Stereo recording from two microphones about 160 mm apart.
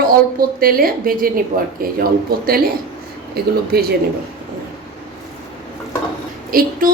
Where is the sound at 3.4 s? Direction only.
75° right (ahead or behind).